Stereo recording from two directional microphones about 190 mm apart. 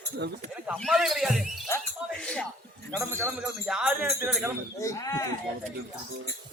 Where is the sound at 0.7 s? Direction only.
Centre (ahead or behind).